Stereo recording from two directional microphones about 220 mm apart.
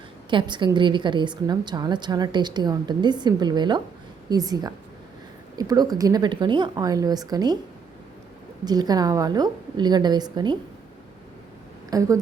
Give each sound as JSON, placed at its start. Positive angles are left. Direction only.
{"t": 0.3, "sound": "a woman's voice", "side_deg": -20}
{"t": 8.6, "sound": "speech", "side_deg": -20}
{"t": 11.9, "sound": "a woman's voice", "side_deg": -15}